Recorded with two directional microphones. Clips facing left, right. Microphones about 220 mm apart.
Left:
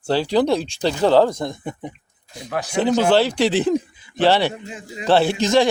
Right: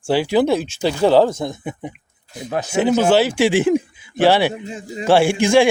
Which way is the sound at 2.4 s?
25° right (ahead or behind).